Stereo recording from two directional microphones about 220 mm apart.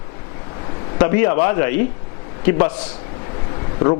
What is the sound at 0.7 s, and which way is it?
A man's voice, 20° left (ahead or behind).